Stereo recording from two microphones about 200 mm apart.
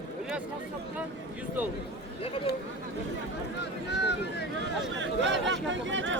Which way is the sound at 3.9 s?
55° left (ahead or behind).